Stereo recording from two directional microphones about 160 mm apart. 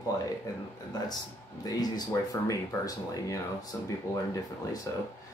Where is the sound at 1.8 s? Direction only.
25° left (ahead or behind).